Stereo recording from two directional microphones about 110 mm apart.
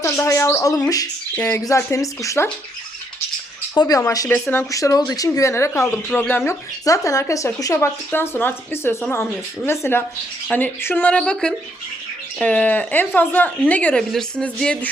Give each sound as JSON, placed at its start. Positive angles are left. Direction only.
{"t": 0.0, "sound": "speech", "side_deg": 25}
{"t": 3.8, "sound": "speech", "side_deg": 35}